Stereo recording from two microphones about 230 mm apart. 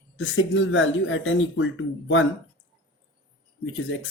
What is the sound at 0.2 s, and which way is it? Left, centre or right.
Speech, left.